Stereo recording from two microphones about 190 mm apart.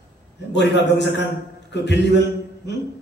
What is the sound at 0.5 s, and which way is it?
A man's voice, 65° left (ahead or behind).